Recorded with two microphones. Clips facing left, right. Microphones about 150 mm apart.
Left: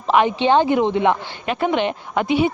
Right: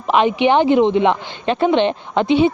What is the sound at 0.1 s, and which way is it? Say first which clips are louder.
Speech: right 1 dB; 20° right (ahead or behind).